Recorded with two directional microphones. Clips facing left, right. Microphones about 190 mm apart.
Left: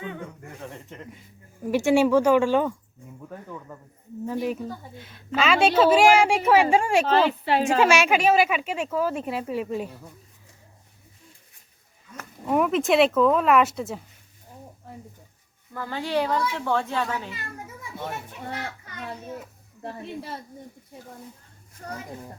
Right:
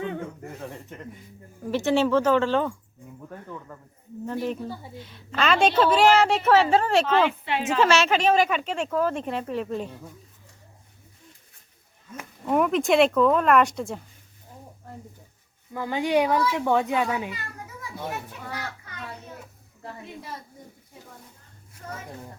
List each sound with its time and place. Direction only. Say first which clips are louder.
0.6 s a sound: left 1 dB; centre (ahead or behind)
1.6 s speech: left 3 dB; 10° left (ahead or behind)
7.1 s a woman's voice: left 2 dB; 35° left (ahead or behind)
7.8 s speech: right 2 dB; 10° left (ahead or behind)
12.5 s speech: even; centre (ahead or behind)
15.7 s speech: right 4 dB; 15° right (ahead or behind)
21.8 s a woman's voice: left 2 dB; 40° left (ahead or behind)